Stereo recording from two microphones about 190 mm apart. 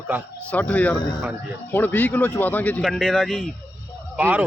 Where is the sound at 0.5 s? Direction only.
5° left (ahead or behind).